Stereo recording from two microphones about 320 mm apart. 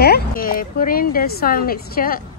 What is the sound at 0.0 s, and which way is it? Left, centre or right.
Speech, left.